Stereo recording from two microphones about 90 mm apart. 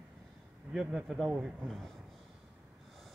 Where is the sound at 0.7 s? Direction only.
5° right (ahead or behind).